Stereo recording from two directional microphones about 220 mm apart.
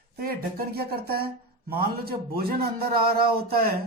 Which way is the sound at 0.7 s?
45° right (ahead or behind).